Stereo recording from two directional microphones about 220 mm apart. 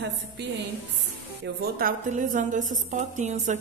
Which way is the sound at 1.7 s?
35° right (ahead or behind).